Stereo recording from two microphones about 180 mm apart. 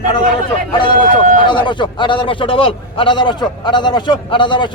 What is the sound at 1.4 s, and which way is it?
A man's voice, 25° left (ahead or behind).